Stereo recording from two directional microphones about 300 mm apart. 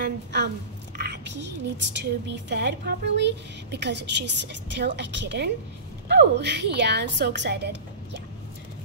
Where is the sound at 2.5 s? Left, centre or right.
Right.